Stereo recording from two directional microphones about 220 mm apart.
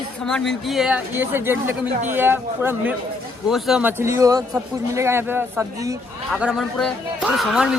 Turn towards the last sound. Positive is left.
turn(degrees=-5)  # may be behind; listen again after turning